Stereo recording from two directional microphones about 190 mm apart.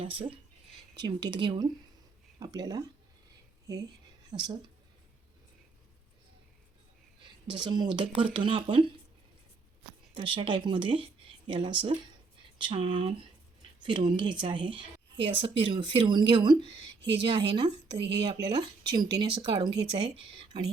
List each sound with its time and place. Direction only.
0.0 s speech: 30° right (ahead or behind)
7.5 s speech: 25° right (ahead or behind)
10.2 s speech: 25° right (ahead or behind)
13.7 s a sound: 25° right (ahead or behind)
14.2 s speech: 25° right (ahead or behind)
17.0 s a woman's voice: 65° right (ahead or behind)
18.4 s speech: 20° right (ahead or behind)